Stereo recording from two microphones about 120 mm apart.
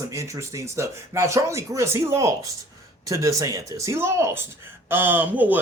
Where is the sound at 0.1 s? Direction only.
25° right (ahead or behind).